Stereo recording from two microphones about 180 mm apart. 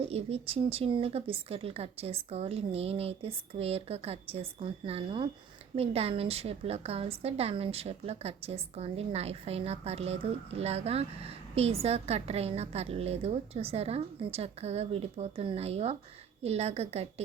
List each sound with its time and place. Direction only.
0.0 s a woman's voice: 35° right (ahead or behind)